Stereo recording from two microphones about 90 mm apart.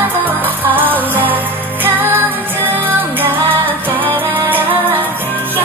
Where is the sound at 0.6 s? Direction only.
20° right (ahead or behind).